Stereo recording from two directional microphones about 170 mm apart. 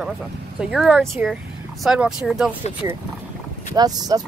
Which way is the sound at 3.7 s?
20° right (ahead or behind).